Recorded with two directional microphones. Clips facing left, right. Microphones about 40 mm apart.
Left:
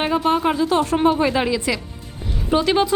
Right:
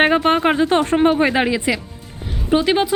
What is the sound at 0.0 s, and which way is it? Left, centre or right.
A woman's voice, right.